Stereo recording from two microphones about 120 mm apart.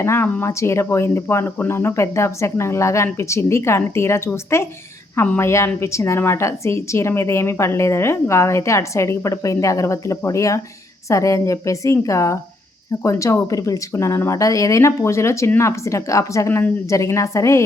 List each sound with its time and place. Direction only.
0.0 s a woman's voice: 20° left (ahead or behind)